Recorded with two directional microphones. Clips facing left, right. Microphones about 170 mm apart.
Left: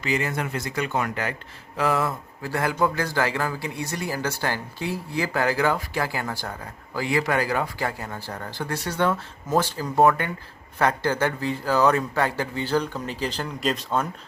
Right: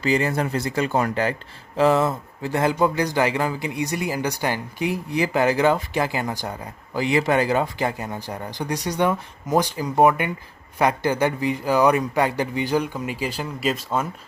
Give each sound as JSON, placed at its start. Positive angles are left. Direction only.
{"t": 0.0, "sound": "speech", "side_deg": -35}